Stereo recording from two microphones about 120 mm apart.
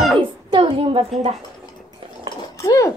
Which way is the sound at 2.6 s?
25° left (ahead or behind).